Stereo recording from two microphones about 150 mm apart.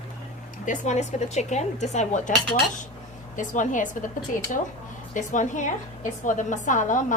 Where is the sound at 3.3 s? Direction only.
60° left (ahead or behind).